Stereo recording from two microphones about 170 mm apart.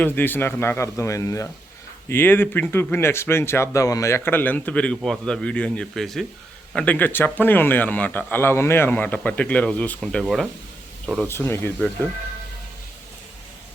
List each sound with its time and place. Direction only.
0.0 s speech: 10° left (ahead or behind)
11.3 s speech: 15° left (ahead or behind)